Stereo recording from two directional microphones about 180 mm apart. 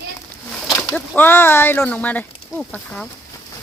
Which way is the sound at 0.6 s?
Centre (ahead or behind).